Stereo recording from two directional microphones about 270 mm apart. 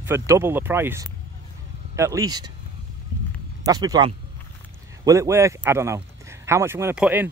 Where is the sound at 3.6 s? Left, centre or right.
Centre.